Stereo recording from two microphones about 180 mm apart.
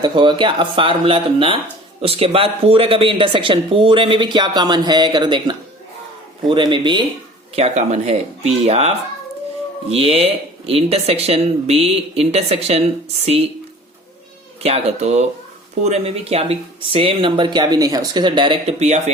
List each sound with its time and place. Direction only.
0.0 s speech: 25° right (ahead or behind)
7.5 s speech: 35° right (ahead or behind)
14.6 s speech: 35° right (ahead or behind)